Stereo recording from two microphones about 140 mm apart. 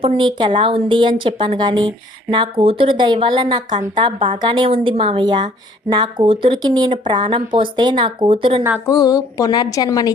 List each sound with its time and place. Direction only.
0.0 s speech: 35° right (ahead or behind)
8.9 s a woman's voice: 25° left (ahead or behind)